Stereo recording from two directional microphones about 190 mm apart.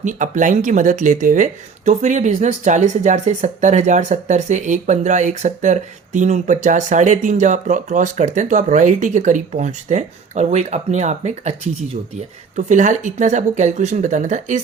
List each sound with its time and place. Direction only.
0.0 s speech: 40° right (ahead or behind)